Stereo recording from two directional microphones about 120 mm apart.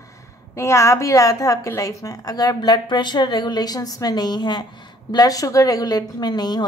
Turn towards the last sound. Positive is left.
turn(degrees=35)  # may be behind; listen again after turning